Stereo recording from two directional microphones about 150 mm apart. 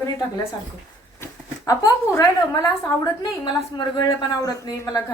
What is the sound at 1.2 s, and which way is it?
Speech, 25° left (ahead or behind).